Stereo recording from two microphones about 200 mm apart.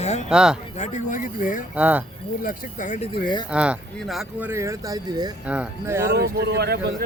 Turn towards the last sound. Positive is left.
turn(degrees=-55)  # may be behind; listen again after turning